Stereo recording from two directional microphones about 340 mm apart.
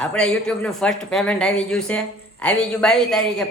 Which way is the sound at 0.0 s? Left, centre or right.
Centre.